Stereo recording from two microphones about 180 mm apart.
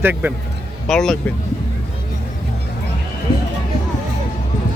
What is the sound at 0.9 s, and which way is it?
Speech, centre (ahead or behind).